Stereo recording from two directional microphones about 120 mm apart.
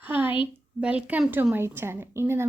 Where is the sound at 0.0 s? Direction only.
15° right (ahead or behind).